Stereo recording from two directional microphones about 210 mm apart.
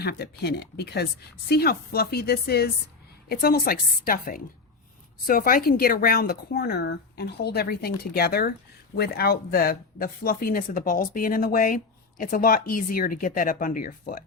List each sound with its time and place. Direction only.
0.0 s speech: 50° left (ahead or behind)